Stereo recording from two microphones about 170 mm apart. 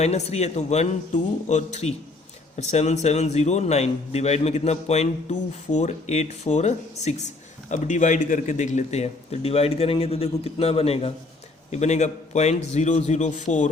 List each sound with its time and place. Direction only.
0.0 s a man's voice: 40° left (ahead or behind)